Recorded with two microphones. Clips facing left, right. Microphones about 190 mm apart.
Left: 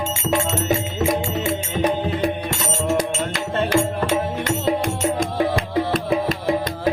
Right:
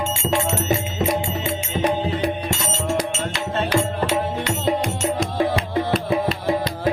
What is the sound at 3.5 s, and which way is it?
Music, 55° left (ahead or behind).